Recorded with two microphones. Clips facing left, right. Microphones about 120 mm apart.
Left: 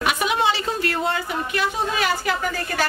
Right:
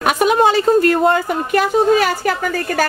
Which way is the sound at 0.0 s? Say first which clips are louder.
Right 8 dB; 45° right (ahead or behind).